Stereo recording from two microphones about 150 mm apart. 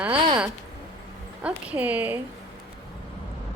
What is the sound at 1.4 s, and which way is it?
Speech, 10° right (ahead or behind).